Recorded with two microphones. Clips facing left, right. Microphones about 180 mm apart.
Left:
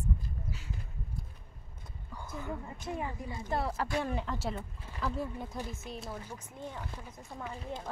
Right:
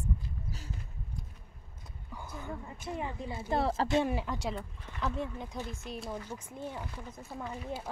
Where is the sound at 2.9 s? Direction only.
25° right (ahead or behind).